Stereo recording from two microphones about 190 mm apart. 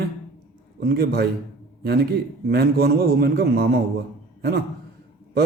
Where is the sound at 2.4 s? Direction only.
55° right (ahead or behind).